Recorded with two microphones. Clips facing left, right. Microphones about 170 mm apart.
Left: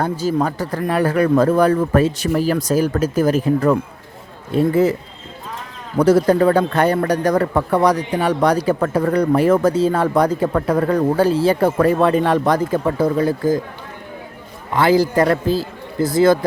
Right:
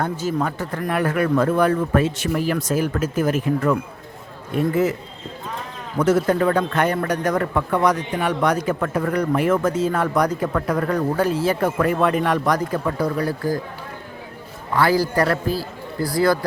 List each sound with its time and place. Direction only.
0.0 s a man's voice: 35° left (ahead or behind)
6.0 s a man's voice: 35° left (ahead or behind)
14.7 s a man's voice: 20° left (ahead or behind)